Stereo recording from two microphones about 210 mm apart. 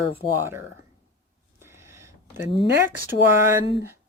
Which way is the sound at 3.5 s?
10° right (ahead or behind).